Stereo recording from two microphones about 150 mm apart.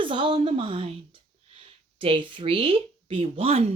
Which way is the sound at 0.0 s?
35° right (ahead or behind).